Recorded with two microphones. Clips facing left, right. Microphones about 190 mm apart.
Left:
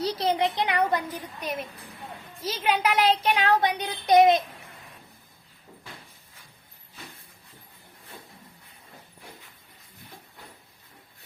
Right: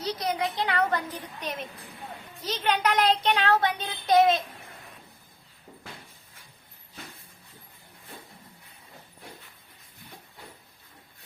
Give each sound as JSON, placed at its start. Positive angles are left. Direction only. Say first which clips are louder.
{"t": 0.0, "sound": "speech", "louder": "left 4 dB", "side_deg": 30}